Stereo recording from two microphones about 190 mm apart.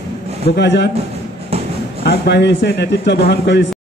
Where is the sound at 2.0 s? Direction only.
60° left (ahead or behind).